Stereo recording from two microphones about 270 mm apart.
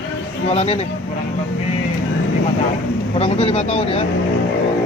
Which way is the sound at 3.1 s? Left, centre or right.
Left.